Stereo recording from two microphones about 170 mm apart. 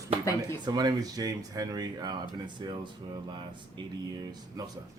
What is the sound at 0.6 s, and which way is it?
Speech, 25° right (ahead or behind).